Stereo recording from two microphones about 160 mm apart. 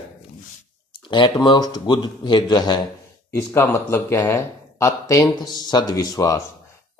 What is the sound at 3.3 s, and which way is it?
A man's voice, 15° left (ahead or behind).